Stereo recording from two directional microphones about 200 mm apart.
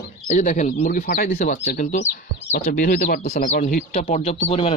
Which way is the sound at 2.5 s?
50° left (ahead or behind).